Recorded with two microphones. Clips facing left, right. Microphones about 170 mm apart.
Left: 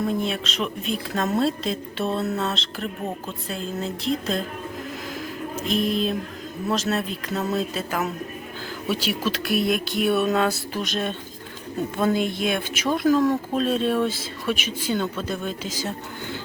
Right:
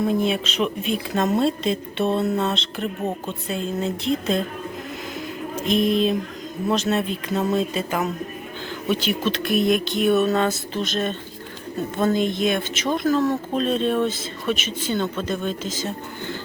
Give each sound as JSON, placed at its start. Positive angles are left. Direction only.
{"t": 0.0, "sound": "speech", "side_deg": 0}
{"t": 5.6, "sound": "speech", "side_deg": 0}